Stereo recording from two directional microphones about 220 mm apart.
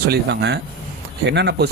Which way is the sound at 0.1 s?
50° right (ahead or behind).